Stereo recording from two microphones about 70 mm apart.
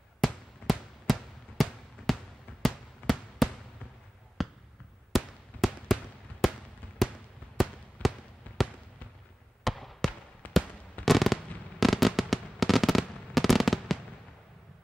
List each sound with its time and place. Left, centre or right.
0.2 s fireworks: centre
2.1 s a sound: centre
2.6 s fireworks: centre
4.4 s basketball bounce: centre
5.1 s fireworks: centre
7.6 s fireworks: centre
8.0 s fireworks: left
9.7 s basketball bounce: centre
10.4 s fireworks: left
11.1 s fireworks: centre